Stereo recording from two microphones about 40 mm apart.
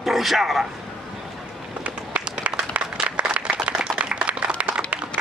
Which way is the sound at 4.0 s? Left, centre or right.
Right.